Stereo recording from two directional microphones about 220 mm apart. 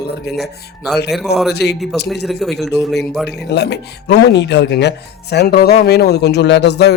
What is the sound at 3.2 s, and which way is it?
A man's voice, 50° left (ahead or behind).